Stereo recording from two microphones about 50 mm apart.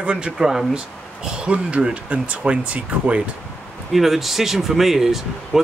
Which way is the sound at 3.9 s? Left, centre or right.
Centre.